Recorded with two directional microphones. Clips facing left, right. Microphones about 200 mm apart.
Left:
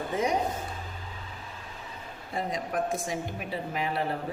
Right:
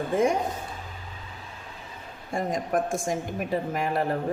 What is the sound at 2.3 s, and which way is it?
A woman's voice, 45° right (ahead or behind).